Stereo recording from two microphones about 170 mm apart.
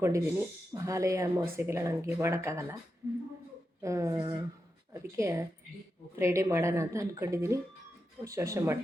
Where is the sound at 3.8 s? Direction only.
20° right (ahead or behind).